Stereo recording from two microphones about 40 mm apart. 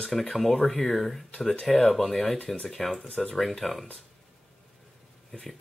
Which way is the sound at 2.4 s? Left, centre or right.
Left.